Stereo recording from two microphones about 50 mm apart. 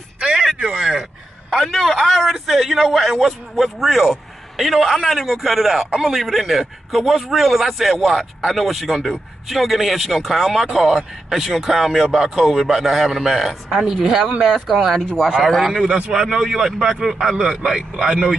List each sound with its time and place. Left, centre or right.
0.2 s a sound: centre
0.7 s speech: centre
1.7 s a man's voice: centre
13.7 s a man's voice: centre